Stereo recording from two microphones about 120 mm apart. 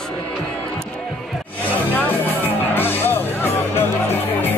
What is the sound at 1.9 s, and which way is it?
Music, 15° left (ahead or behind).